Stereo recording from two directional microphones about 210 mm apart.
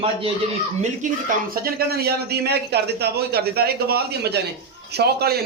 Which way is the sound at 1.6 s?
45° right (ahead or behind).